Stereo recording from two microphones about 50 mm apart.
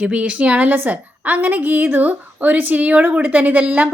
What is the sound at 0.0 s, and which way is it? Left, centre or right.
A woman's voice, right.